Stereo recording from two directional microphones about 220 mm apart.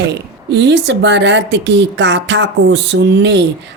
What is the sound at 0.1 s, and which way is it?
A woman's voice, 55° right (ahead or behind).